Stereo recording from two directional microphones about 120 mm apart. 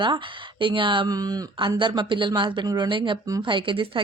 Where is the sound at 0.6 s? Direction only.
45° right (ahead or behind).